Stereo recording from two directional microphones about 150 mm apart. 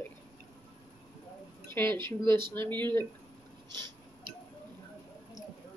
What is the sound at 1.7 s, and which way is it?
Speech, 15° left (ahead or behind).